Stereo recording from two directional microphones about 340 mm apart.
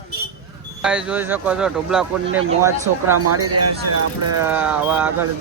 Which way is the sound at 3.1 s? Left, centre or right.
Right.